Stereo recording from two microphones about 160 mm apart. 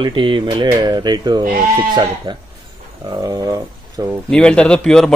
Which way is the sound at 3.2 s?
25° right (ahead or behind).